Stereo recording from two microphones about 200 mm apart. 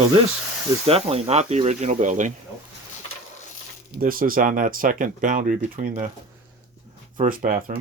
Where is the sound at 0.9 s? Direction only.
30° right (ahead or behind).